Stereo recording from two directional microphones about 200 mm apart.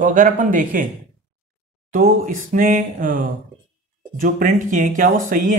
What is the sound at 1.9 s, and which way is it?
A man's voice, 40° right (ahead or behind).